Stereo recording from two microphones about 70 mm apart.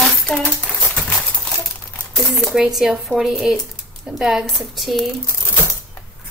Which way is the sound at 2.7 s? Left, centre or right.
Centre.